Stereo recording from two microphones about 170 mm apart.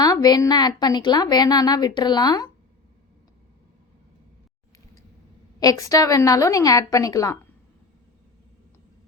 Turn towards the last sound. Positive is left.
turn(degrees=20)  # may be behind; listen again after turning